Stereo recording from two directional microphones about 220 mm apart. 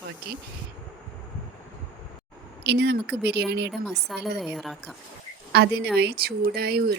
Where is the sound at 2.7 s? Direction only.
50° right (ahead or behind).